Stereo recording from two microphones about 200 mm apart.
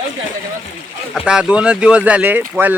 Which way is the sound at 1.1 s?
5° right (ahead or behind).